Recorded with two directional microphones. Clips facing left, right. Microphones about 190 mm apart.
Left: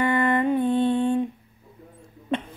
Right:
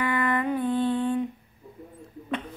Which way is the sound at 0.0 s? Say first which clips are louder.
Left 4 dB; 25° left (ahead or behind).